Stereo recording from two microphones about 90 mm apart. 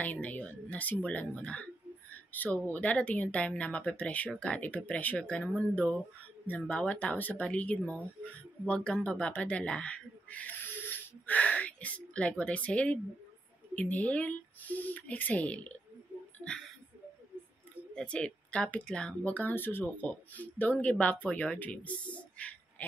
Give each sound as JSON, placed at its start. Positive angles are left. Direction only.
{"t": 0.0, "sound": "speech", "side_deg": 15}
{"t": 17.9, "sound": "speech", "side_deg": 10}
{"t": 22.1, "sound": "a sound", "side_deg": 15}